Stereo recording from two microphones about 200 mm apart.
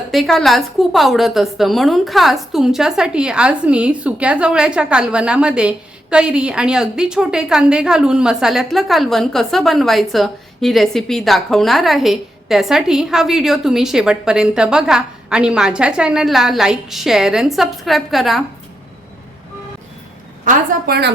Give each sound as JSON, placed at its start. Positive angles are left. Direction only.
{"t": 0.1, "sound": "a woman's voice", "side_deg": 0}
{"t": 20.4, "sound": "a woman's voice", "side_deg": -45}